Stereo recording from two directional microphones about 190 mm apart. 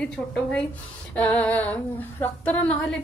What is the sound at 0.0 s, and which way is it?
Speech, 5° left (ahead or behind).